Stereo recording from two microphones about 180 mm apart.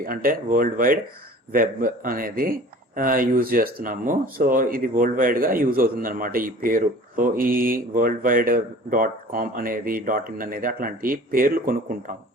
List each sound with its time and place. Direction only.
0.0 s speech: 55° right (ahead or behind)